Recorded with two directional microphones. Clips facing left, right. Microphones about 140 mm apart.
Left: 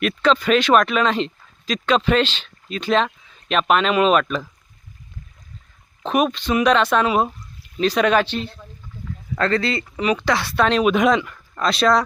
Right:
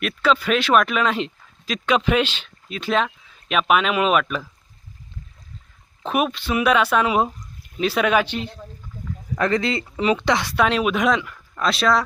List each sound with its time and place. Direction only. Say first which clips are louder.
0.0 s speech: left 2 dB; 5° right (ahead or behind)
6.1 s speech: left 3 dB; 5° right (ahead or behind)